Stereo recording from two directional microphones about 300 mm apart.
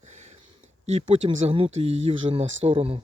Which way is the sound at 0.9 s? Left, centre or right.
Centre.